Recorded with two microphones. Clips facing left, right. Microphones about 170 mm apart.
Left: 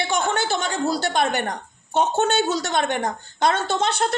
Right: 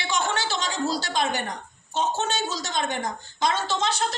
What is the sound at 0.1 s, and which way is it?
A woman's voice, 55° left (ahead or behind).